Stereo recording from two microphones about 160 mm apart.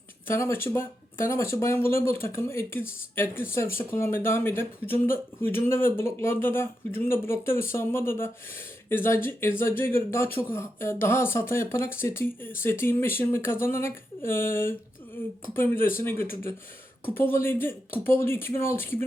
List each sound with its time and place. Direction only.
0.3 s speech: 15° left (ahead or behind)
16.0 s speech: 15° left (ahead or behind)